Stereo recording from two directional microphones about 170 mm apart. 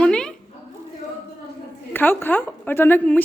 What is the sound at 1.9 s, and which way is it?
A woman's voice, 10° left (ahead or behind).